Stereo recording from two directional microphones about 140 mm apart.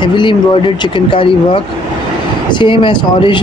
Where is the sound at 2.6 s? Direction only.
35° left (ahead or behind).